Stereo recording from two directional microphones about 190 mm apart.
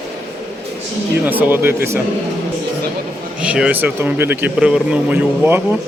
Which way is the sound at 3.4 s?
5° right (ahead or behind).